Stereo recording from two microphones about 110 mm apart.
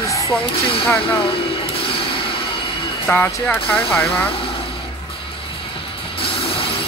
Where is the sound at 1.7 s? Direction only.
60° left (ahead or behind).